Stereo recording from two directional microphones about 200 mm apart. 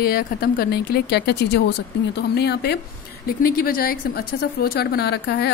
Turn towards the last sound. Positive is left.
turn(degrees=55)  # may be behind; listen again after turning